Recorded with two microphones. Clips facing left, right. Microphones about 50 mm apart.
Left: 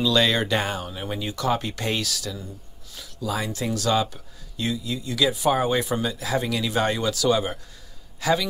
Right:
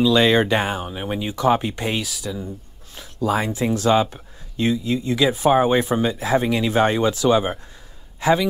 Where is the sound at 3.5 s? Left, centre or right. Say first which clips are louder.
Right 4 dB; right.